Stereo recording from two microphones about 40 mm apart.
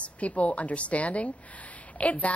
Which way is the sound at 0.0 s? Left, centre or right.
Left.